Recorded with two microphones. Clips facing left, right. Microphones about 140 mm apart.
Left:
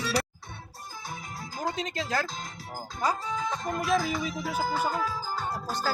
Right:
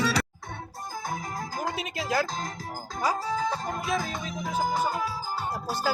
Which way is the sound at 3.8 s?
Centre (ahead or behind).